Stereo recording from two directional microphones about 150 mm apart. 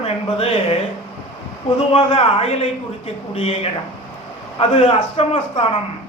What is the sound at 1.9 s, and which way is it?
A woman's voice, 40° left (ahead or behind).